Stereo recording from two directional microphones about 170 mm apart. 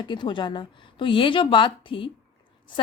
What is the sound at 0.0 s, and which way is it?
A woman's voice, 25° left (ahead or behind).